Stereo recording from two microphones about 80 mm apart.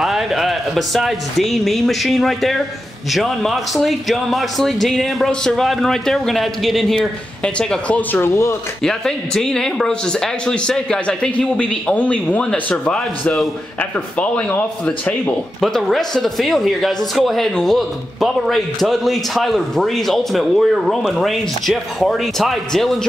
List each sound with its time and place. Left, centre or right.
0.0 s speech: centre
8.2 s speech: left
8.8 s speech: centre
15.6 s speech: centre